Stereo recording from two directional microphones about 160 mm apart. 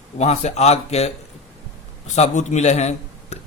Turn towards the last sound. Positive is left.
turn(degrees=45)  # may be behind; listen again after turning